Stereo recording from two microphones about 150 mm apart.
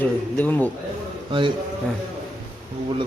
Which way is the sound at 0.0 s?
10° left (ahead or behind).